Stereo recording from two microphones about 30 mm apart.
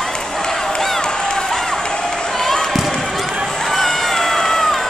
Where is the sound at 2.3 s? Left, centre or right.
Centre.